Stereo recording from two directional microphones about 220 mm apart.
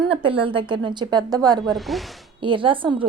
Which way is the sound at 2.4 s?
20° right (ahead or behind).